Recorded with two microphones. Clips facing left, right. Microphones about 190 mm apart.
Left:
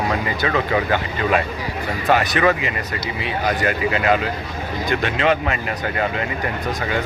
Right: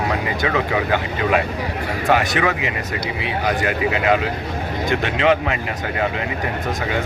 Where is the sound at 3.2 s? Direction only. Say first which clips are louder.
Even; 15° right (ahead or behind).